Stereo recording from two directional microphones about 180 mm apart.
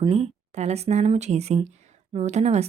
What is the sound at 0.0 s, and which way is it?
A woman's voice, 35° right (ahead or behind).